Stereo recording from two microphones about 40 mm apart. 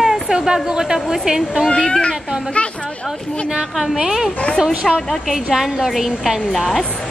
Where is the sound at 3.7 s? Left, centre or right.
Centre.